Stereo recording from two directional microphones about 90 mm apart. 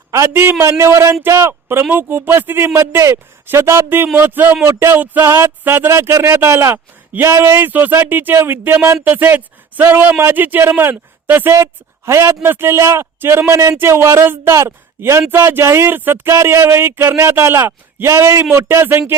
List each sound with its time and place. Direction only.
0.6 s a man's voice: 30° right (ahead or behind)